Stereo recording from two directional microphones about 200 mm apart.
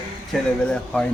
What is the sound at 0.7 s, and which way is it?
Speech, 5° left (ahead or behind).